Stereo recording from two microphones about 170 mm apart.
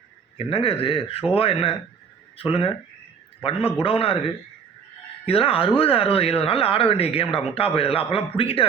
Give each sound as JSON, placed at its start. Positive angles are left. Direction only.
{"t": 0.3, "sound": "speech", "side_deg": 35}
{"t": 3.8, "sound": "speech", "side_deg": 35}
{"t": 5.2, "sound": "speech", "side_deg": 35}